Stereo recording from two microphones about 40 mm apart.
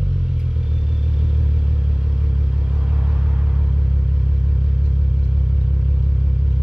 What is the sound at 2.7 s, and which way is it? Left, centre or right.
Vehicle, right.